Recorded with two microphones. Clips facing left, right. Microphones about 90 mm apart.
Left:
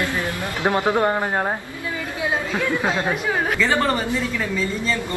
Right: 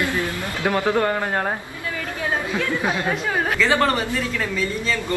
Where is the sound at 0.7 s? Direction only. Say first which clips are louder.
Left 1 dB; 20° left (ahead or behind).